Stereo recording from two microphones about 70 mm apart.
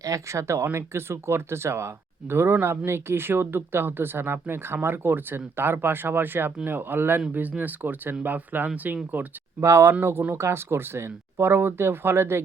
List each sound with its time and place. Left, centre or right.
0.0 s speech: right
9.6 s speech: right